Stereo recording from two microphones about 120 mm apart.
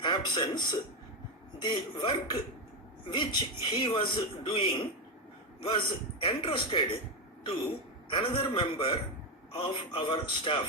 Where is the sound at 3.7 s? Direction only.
45° left (ahead or behind).